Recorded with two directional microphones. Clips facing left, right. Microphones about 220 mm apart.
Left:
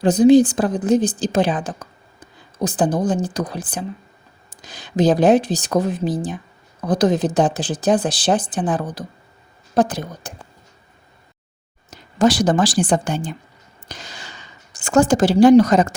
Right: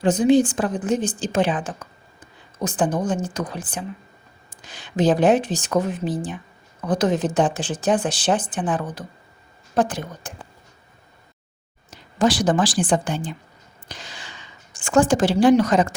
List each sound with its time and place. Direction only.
0.0 s speech: 35° left (ahead or behind)
11.9 s a woman's voice: 40° left (ahead or behind)
13.8 s a sound: 40° left (ahead or behind)